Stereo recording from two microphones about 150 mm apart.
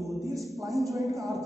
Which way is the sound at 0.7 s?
Centre (ahead or behind).